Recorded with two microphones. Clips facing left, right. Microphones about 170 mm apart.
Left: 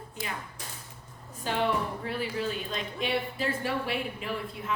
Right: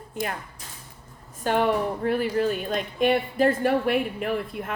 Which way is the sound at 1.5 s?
55° right (ahead or behind).